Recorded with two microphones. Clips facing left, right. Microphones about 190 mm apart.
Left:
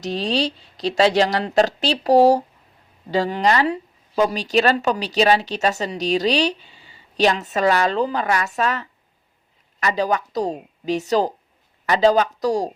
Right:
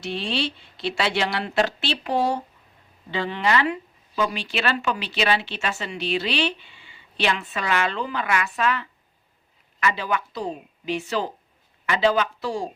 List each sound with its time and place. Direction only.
0.0 s speech: 40° left (ahead or behind)